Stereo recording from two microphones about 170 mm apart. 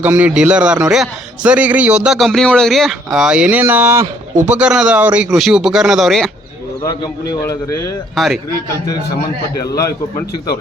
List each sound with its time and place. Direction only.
0.0 s a man's voice: 10° right (ahead or behind)
6.8 s a man's voice: 20° left (ahead or behind)
8.1 s a man's voice: centre (ahead or behind)
9.7 s a man's voice: 20° left (ahead or behind)